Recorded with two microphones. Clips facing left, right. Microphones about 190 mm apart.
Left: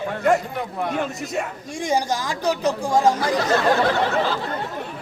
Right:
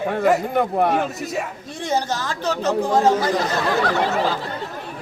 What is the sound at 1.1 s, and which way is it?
Speech, centre (ahead or behind).